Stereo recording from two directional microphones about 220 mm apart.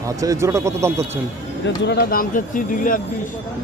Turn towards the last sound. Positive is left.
turn(degrees=40)  # may be behind; listen again after turning